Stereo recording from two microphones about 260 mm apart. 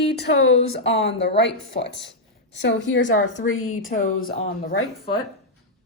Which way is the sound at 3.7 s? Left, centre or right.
Left.